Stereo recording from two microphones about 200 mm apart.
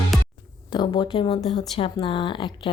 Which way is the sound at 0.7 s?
25° left (ahead or behind).